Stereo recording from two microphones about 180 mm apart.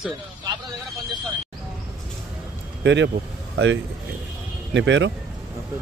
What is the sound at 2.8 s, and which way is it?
A man's voice, 80° right.